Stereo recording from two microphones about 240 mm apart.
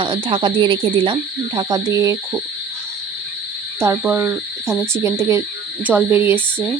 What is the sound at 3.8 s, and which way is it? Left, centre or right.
Speech, centre.